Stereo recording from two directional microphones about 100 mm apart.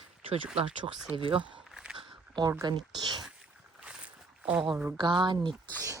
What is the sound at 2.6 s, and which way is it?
Speech, 45° right (ahead or behind).